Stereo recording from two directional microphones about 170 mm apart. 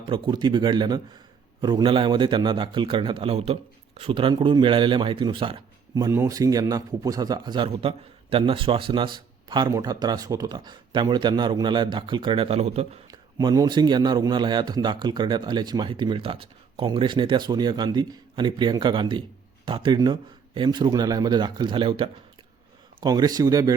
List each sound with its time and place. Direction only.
0.1 s a man's voice: 25° right (ahead or behind)
13.1 s a man's voice: 20° right (ahead or behind)